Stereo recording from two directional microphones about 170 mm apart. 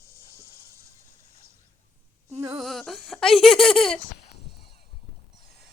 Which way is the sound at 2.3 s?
20° right (ahead or behind).